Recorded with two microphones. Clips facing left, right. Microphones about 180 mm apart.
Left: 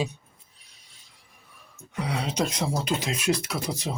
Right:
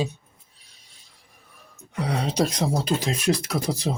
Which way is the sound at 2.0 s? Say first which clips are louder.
Right 4 dB; 40° right (ahead or behind).